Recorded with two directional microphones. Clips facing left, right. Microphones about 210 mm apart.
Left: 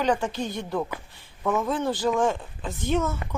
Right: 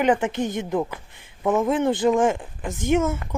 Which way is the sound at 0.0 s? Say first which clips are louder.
Right 4 dB; 20° right (ahead or behind).